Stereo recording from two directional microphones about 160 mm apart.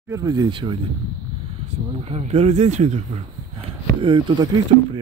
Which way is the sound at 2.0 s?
40° right (ahead or behind).